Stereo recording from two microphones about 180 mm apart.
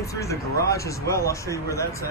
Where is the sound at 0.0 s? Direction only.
15° left (ahead or behind).